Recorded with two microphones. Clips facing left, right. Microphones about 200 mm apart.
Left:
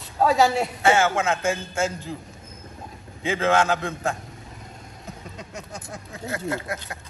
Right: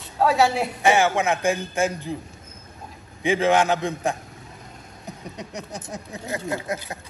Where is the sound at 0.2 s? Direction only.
Centre (ahead or behind).